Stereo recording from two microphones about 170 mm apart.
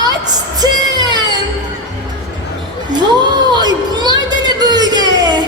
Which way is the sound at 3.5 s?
25° right (ahead or behind).